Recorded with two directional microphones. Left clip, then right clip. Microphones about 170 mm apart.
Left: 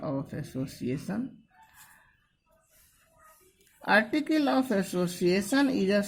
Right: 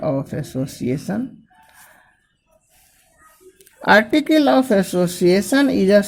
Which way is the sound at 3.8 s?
40° right (ahead or behind).